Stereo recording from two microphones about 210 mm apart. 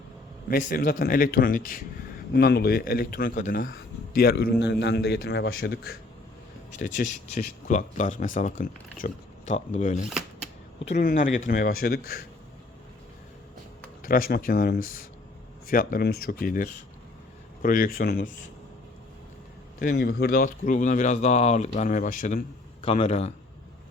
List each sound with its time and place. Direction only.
0.4 s a man's voice: 40° left (ahead or behind)
6.7 s speech: 40° left (ahead or behind)
10.1 s a sound: centre (ahead or behind)
10.8 s a man's voice: 35° left (ahead or behind)
14.0 s a man's voice: 45° left (ahead or behind)
19.8 s speech: 45° left (ahead or behind)
22.8 s speech: 30° left (ahead or behind)